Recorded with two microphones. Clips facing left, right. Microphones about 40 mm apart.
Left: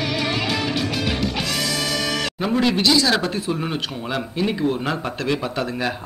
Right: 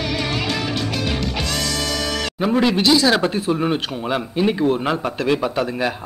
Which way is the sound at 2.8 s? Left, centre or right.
Right.